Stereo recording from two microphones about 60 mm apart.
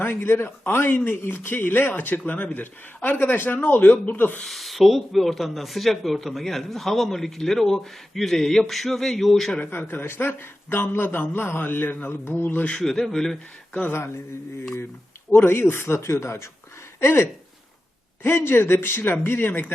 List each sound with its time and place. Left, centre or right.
0.0 s a man's voice: left
4.4 s speech: centre
9.9 s a man's voice: left
12.7 s speech: centre
13.7 s speech: left
15.3 s a man's voice: left